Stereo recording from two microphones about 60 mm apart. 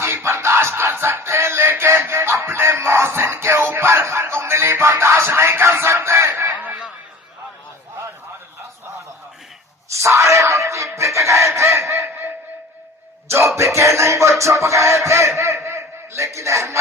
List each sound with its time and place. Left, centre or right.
0.0 s music: right
6.5 s a sound: right
9.9 s chicken: right
13.6 s music: right